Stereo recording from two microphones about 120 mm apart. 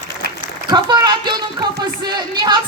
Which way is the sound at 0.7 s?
35° right (ahead or behind).